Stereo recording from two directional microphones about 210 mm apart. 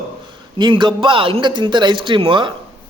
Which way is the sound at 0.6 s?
20° right (ahead or behind).